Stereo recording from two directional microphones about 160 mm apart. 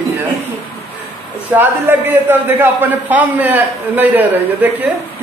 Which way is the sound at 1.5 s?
10° right (ahead or behind).